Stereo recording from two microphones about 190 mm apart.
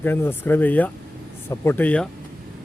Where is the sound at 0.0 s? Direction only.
10° left (ahead or behind).